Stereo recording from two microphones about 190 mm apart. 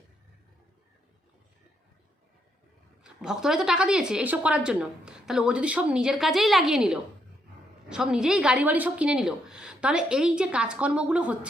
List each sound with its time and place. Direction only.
3.0 s speech: 5° right (ahead or behind)